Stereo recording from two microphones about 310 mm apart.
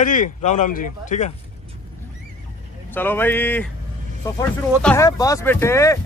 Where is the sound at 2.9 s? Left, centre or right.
Centre.